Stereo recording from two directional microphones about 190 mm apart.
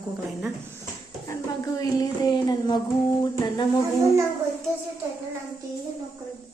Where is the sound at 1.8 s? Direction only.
20° left (ahead or behind).